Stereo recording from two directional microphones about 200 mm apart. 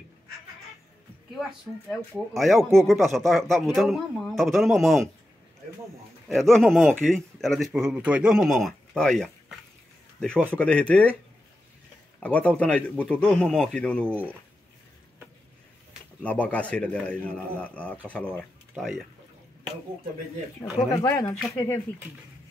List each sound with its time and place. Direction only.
1.3 s speech: centre (ahead or behind)
6.2 s a man's voice: centre (ahead or behind)
12.2 s speech: 5° left (ahead or behind)
16.2 s a man's voice: 5° left (ahead or behind)
21.0 s a man's voice: 15° left (ahead or behind)